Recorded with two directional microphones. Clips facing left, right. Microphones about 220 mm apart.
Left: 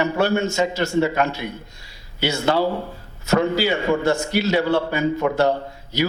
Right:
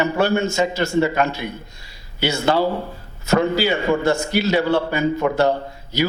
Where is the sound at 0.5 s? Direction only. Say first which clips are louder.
Right 1 dB; 10° right (ahead or behind).